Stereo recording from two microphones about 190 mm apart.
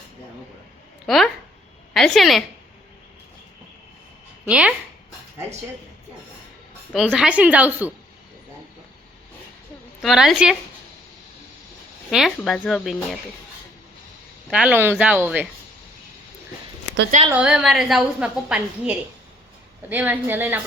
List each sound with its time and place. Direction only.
1.0 s a woman's voice: centre (ahead or behind)
4.4 s speech: 5° right (ahead or behind)
6.9 s a woman's voice: 5° right (ahead or behind)
10.0 s a woman's voice: centre (ahead or behind)
12.1 s a woman's voice: centre (ahead or behind)
14.5 s a woman's voice: 5° right (ahead or behind)
17.2 s a woman's voice: 5° right (ahead or behind)